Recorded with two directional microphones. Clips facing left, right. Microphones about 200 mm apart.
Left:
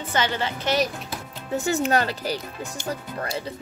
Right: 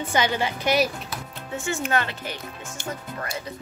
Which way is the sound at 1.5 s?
35° left (ahead or behind).